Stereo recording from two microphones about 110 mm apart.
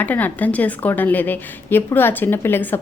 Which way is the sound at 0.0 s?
15° left (ahead or behind).